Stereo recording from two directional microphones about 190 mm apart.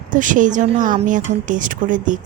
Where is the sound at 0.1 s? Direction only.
45° right (ahead or behind).